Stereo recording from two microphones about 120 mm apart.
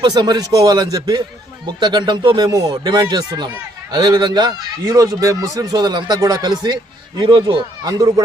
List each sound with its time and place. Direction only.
0.0 s speech: 40° right (ahead or behind)